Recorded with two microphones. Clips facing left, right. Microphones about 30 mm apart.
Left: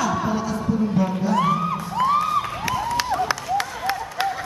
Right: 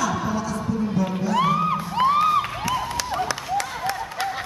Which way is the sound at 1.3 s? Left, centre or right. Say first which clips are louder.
Right 2 dB; centre.